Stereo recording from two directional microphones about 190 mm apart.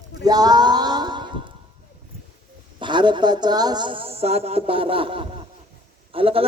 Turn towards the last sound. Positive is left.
turn(degrees=-30)  # may be behind; listen again after turning